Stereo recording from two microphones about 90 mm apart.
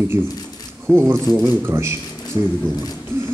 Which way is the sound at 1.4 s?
30° right (ahead or behind).